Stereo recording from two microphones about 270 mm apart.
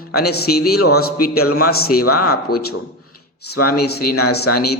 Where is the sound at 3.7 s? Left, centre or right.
Left.